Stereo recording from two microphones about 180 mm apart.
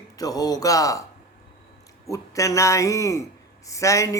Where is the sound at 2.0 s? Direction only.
15° left (ahead or behind).